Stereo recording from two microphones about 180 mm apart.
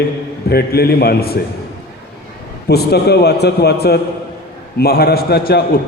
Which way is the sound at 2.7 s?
65° left (ahead or behind).